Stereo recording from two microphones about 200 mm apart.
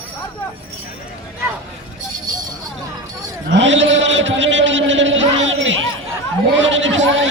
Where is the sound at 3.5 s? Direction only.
65° right (ahead or behind).